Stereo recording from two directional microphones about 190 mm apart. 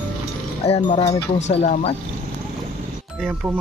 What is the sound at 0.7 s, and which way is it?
Speech, 35° left (ahead or behind).